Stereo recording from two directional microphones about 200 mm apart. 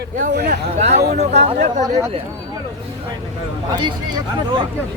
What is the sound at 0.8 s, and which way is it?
Speech, 35° right (ahead or behind).